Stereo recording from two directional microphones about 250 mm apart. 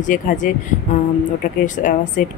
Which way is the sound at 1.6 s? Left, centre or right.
Left.